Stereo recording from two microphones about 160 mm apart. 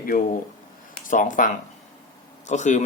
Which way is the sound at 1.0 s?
55° left (ahead or behind).